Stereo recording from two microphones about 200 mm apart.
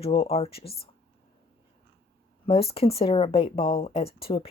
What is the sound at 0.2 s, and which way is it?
Speech, 30° left (ahead or behind).